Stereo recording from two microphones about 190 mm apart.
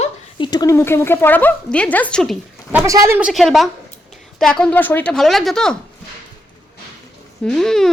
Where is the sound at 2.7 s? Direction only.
15° right (ahead or behind); by 5.7 s centre (ahead or behind).